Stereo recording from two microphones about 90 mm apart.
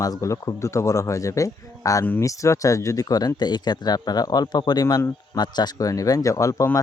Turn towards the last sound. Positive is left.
turn(degrees=35)  # may be behind; listen again after turning